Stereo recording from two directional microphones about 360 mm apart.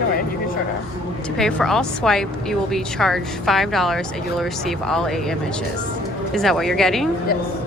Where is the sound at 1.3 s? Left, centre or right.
Centre.